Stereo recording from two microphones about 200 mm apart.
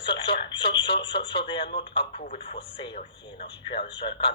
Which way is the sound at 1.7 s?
25° left (ahead or behind).